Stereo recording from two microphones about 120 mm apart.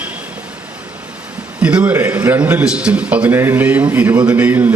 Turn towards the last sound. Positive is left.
turn(degrees=-15)  # may be behind; listen again after turning